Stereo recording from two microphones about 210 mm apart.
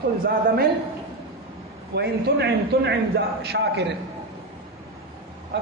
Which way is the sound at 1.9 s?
50° right (ahead or behind).